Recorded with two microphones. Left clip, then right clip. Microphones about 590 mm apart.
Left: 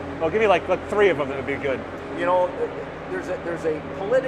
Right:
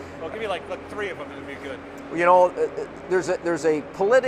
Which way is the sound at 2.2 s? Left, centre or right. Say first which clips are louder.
Right 4 dB; right.